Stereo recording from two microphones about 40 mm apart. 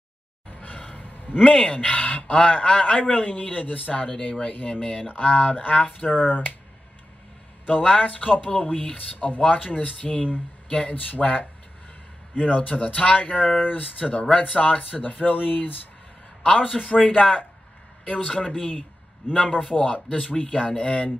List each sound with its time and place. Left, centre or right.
0.5 s a sound: left
1.5 s a man's voice: left
7.9 s a man's voice: left
16.4 s a man's voice: left